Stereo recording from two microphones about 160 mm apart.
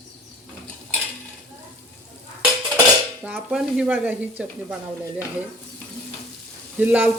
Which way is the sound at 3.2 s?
5° right (ahead or behind).